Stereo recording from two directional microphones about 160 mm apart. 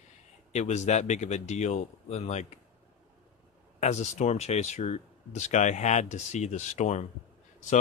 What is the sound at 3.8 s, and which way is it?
Speech, 45° left (ahead or behind).